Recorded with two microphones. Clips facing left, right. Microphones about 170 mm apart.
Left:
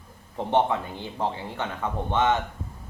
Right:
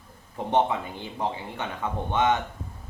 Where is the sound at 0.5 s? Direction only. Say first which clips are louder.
Left 1 dB; 15° right (ahead or behind).